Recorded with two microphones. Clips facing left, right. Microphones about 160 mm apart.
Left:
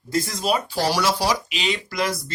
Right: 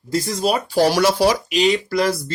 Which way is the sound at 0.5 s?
50° right (ahead or behind).